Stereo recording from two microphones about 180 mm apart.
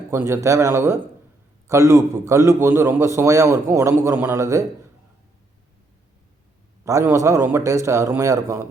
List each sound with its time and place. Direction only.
0.1 s a man's voice: 15° right (ahead or behind)
6.8 s a man's voice: 15° right (ahead or behind)